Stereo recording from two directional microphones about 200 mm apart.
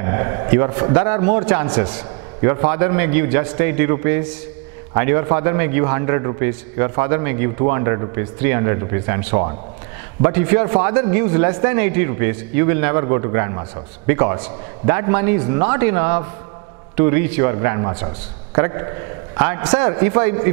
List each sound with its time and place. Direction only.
0.0 s a man's voice: 20° right (ahead or behind)